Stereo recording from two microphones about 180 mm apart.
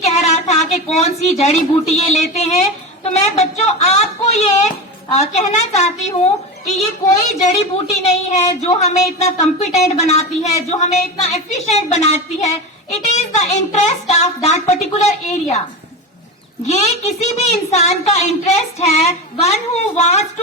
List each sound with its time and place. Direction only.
0.0 s a woman's voice: 35° left (ahead or behind)
16.6 s a woman's voice: 35° left (ahead or behind)